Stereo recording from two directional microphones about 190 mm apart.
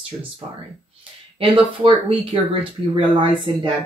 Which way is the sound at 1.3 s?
25° right (ahead or behind).